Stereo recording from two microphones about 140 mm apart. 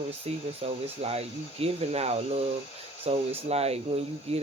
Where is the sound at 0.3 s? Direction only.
45° right (ahead or behind).